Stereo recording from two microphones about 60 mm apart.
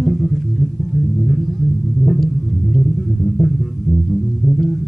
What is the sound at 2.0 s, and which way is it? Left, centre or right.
Music, centre.